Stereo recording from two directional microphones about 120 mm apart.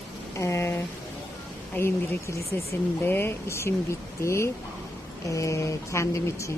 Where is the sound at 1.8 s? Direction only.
20° left (ahead or behind).